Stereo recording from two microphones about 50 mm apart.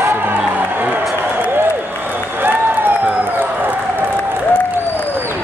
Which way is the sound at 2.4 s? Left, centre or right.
Right.